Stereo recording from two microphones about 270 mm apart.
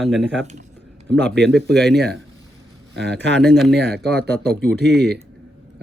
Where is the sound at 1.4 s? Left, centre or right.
Right.